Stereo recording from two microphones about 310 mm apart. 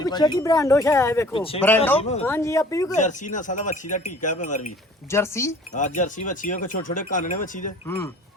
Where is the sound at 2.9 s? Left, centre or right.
Left.